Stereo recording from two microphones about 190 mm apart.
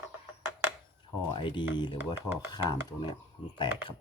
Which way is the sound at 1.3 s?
25° left (ahead or behind).